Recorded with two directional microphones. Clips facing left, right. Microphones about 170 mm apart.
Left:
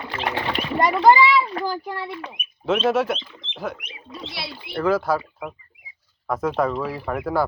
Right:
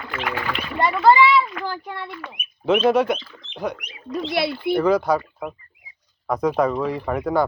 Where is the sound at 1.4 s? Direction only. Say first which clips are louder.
Left 1 dB; 30° left (ahead or behind).